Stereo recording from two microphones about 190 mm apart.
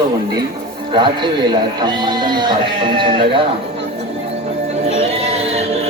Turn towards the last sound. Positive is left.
turn(degrees=-35)  # may be behind; listen again after turning